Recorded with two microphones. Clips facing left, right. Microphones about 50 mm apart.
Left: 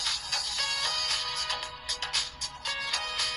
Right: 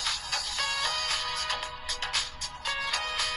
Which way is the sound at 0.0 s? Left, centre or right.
Right.